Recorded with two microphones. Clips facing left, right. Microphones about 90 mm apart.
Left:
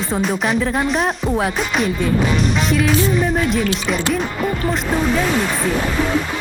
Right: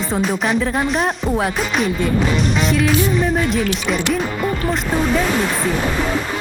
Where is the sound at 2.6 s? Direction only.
Centre (ahead or behind).